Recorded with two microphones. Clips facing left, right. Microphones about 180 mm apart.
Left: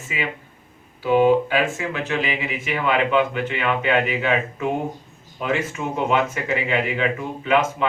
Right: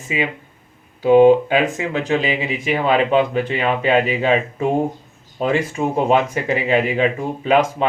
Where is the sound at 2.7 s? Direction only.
35° right (ahead or behind).